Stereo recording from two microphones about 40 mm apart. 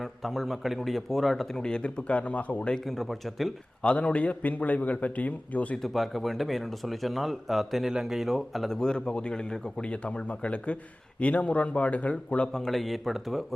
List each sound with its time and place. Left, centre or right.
0.0 s speech: centre
1.5 s a man's voice: centre
1.8 s a man's voice: left
2.8 s speech: centre
3.8 s a man's voice: left
5.9 s speech: centre
8.7 s a man's voice: centre
12.5 s speech: centre